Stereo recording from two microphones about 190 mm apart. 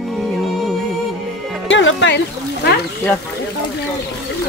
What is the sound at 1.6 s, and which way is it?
Music, 75° left (ahead or behind).